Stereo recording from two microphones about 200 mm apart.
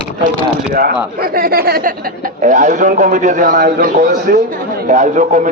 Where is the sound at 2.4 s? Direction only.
40° right (ahead or behind).